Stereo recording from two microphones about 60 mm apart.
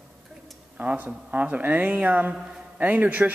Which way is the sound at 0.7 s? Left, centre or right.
Right.